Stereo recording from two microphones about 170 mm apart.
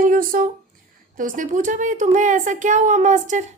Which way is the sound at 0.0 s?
55° right (ahead or behind).